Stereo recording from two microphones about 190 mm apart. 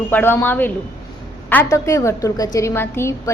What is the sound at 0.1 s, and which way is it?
A woman's voice, 10° left (ahead or behind).